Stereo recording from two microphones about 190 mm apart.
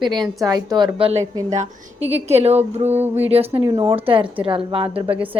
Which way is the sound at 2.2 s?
35° right (ahead or behind).